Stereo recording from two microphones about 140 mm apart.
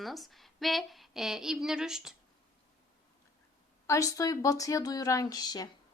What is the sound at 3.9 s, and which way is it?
A woman's voice, 20° left (ahead or behind).